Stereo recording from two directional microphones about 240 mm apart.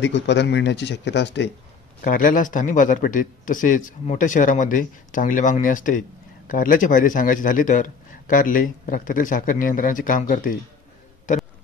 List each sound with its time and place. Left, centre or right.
0.0 s speech: left
2.0 s a man's voice: left
11.3 s a sound: left